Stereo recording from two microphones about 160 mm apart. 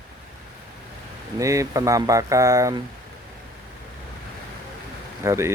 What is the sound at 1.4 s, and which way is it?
Speech, 20° right (ahead or behind).